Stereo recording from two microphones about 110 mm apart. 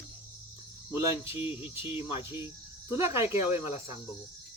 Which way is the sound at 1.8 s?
55° left (ahead or behind).